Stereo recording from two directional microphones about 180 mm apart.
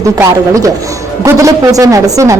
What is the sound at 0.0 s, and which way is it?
A woman's voice, 15° right (ahead or behind).